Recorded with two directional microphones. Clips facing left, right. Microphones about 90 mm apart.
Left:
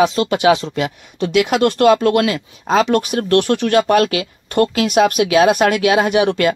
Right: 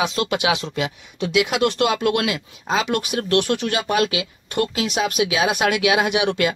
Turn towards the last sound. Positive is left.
turn(degrees=45)  # may be behind; listen again after turning